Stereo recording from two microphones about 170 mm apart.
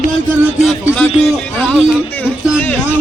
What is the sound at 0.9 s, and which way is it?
A man's voice, 5° left (ahead or behind).